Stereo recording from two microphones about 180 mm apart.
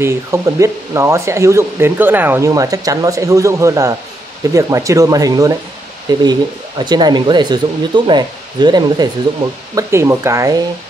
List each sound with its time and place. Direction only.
0.0 s speech: 15° right (ahead or behind)